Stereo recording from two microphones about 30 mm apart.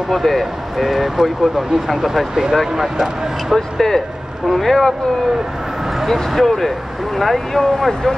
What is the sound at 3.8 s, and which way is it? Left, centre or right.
Speech, centre.